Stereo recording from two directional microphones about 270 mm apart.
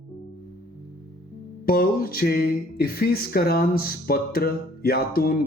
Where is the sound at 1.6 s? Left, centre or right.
Left.